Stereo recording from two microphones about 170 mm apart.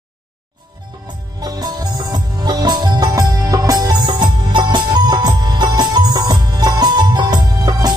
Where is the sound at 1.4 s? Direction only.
25° right (ahead or behind).